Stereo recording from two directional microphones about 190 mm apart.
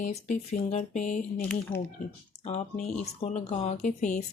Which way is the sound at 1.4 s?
5° left (ahead or behind).